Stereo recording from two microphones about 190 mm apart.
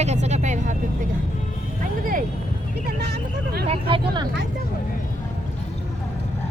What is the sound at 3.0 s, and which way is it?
Speech, 60° right (ahead or behind).